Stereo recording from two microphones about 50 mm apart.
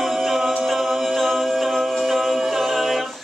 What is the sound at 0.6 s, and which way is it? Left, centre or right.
A capella, centre.